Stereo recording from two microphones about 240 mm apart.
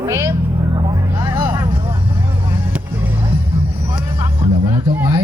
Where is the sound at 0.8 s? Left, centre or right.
Centre.